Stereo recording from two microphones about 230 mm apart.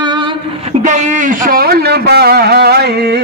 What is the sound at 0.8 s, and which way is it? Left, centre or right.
A man's voice, right.